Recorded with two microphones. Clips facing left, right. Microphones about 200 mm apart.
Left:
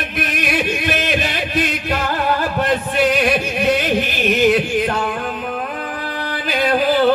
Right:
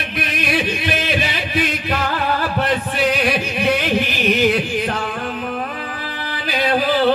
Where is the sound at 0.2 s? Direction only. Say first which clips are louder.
Even; 45° left (ahead or behind).